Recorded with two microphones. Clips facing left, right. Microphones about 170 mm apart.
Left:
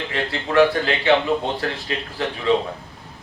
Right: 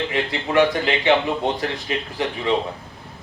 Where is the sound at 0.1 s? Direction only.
15° right (ahead or behind).